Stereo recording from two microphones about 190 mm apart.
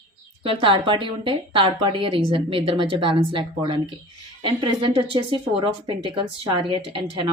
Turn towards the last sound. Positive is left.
turn(degrees=-25)  # may be behind; listen again after turning